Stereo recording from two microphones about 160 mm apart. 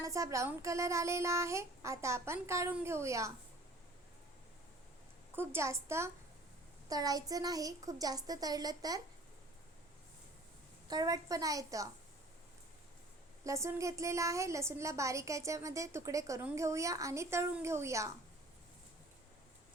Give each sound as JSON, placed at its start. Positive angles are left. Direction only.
{"t": 0.0, "sound": "speech", "side_deg": -20}
{"t": 5.3, "sound": "a woman's voice", "side_deg": -15}
{"t": 10.8, "sound": "a woman's voice", "side_deg": -25}
{"t": 13.4, "sound": "a woman's voice", "side_deg": -20}